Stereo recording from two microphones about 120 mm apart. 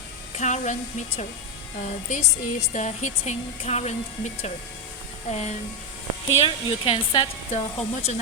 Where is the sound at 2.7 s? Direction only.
85° left; by 5.5 s 65° left (ahead or behind).